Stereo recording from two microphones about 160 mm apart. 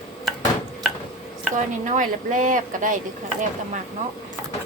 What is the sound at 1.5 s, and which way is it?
Speech, 55° right (ahead or behind).